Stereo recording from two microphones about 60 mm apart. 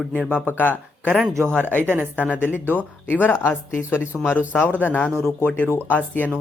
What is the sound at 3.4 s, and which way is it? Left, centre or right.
Speech, left.